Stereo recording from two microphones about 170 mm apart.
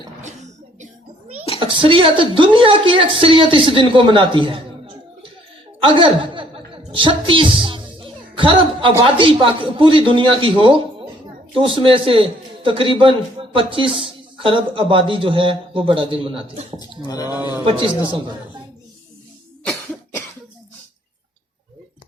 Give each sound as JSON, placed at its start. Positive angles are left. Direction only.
{"t": 1.5, "sound": "a woman's voice", "side_deg": -30}
{"t": 5.8, "sound": "a woman's voice", "side_deg": -30}
{"t": 16.7, "sound": "speech", "side_deg": 20}
{"t": 17.3, "sound": "a man's voice", "side_deg": -10}
{"t": 17.7, "sound": "a woman's voice", "side_deg": -30}
{"t": 19.6, "sound": "cough", "side_deg": 5}